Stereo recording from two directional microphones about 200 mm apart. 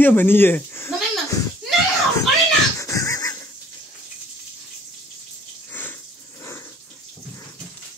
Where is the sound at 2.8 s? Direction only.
15° left (ahead or behind).